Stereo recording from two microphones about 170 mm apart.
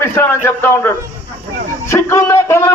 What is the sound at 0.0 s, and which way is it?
A man's voice, 15° left (ahead or behind).